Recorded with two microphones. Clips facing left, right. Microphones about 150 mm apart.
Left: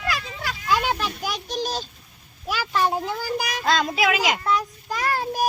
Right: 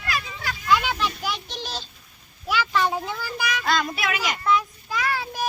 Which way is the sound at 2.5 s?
40° left (ahead or behind).